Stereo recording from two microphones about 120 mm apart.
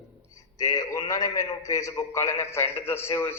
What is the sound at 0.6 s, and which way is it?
A man's voice, 30° left (ahead or behind).